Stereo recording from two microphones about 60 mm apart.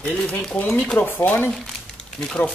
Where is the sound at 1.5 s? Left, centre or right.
Centre.